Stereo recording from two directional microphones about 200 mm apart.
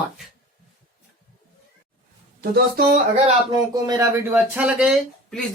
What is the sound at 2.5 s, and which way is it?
Speech, 50° right (ahead or behind).